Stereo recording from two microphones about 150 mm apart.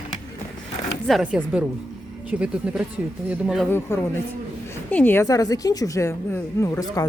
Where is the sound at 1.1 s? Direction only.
10° right (ahead or behind).